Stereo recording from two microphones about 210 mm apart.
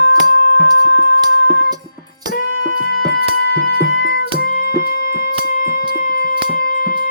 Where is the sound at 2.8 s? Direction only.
50° left (ahead or behind).